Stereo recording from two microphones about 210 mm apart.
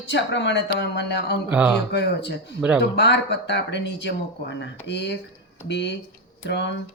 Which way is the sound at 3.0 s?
55° left (ahead or behind).